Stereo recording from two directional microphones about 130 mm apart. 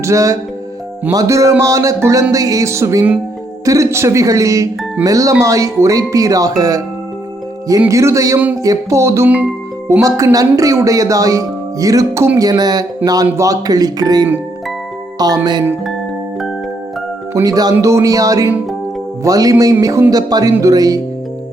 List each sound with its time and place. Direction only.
0.0 s speech: 25° right (ahead or behind)
7.9 s speech: 25° right (ahead or behind)
15.2 s music: 30° right (ahead or behind)
17.3 s speech: 25° right (ahead or behind)